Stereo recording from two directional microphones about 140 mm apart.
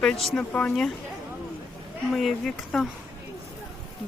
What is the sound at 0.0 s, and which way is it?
Speech, 5° left (ahead or behind).